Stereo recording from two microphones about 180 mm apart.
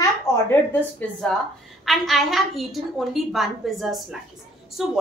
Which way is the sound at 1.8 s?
Centre (ahead or behind).